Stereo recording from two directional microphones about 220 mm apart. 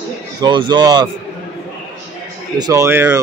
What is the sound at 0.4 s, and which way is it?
Speech, 20° right (ahead or behind).